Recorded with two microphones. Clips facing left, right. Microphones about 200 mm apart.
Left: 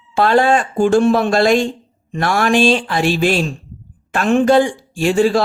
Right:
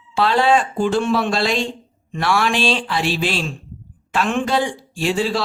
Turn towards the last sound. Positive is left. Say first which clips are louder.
# left 6 dB
turn(degrees=50)  # may be behind; listen again after turning